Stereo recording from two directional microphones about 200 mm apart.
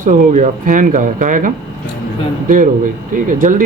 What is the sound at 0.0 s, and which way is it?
Speech, 40° right (ahead or behind).